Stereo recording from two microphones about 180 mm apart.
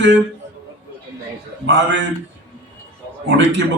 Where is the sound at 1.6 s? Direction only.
85° right.